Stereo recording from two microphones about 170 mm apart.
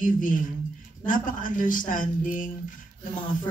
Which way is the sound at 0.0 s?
50° left (ahead or behind).